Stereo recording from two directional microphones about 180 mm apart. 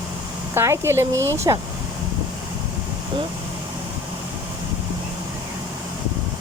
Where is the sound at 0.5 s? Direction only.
15° right (ahead or behind).